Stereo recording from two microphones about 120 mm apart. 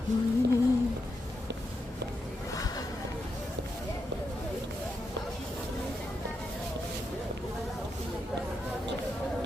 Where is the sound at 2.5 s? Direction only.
30° left (ahead or behind).